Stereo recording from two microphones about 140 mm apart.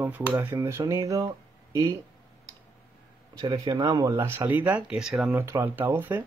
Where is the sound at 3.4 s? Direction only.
30° right (ahead or behind).